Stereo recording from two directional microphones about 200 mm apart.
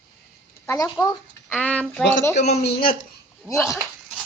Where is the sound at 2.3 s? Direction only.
35° left (ahead or behind).